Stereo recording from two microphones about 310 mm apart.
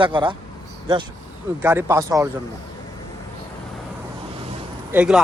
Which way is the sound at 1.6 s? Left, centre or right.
Centre.